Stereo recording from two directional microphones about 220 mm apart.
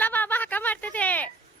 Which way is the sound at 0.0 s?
10° left (ahead or behind).